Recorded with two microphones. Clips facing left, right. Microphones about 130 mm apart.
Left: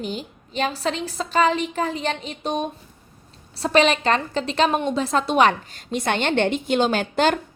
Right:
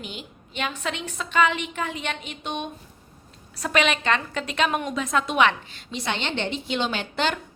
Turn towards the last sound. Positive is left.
turn(degrees=45)  # may be behind; listen again after turning